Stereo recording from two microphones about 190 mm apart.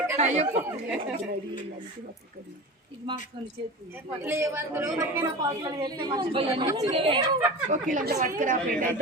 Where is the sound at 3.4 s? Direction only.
25° right (ahead or behind).